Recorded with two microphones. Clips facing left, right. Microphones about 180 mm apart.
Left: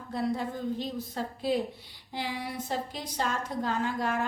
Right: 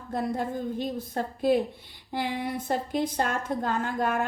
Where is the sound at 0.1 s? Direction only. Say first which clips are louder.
Right 2 dB; 50° right (ahead or behind).